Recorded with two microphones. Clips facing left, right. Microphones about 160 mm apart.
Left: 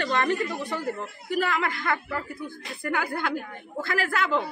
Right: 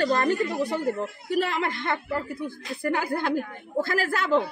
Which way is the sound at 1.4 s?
30° right (ahead or behind).